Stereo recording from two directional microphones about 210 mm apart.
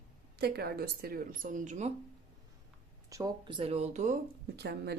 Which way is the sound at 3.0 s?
15° right (ahead or behind).